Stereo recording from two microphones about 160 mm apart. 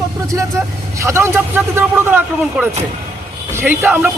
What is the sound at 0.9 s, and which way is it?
A man's voice, 15° right (ahead or behind).